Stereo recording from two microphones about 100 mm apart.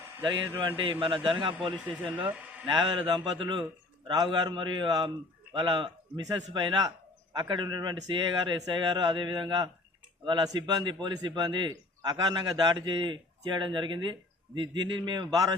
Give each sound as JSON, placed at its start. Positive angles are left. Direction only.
{"t": 0.2, "sound": "a man's voice", "side_deg": -50}
{"t": 1.9, "sound": "speech", "side_deg": -15}
{"t": 2.6, "sound": "a man's voice", "side_deg": -55}